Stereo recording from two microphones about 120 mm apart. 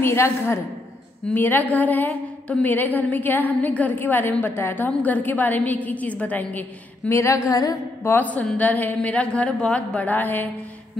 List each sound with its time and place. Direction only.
0.0 s a woman's voice: 20° left (ahead or behind)